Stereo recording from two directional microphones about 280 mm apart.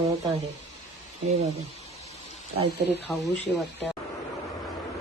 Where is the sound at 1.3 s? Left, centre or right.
Right.